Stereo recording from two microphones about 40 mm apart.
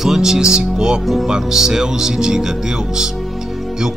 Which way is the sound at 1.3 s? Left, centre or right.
Centre.